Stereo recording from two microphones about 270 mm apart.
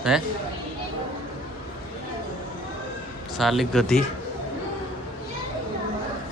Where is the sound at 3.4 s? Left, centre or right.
Centre.